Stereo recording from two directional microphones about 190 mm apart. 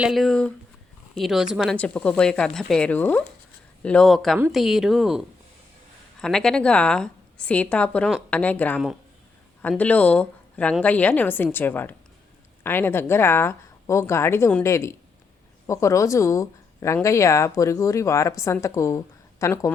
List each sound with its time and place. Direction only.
0.0 s speech: centre (ahead or behind)